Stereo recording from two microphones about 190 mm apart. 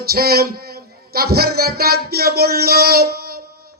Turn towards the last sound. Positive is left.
turn(degrees=-55)  # may be behind; listen again after turning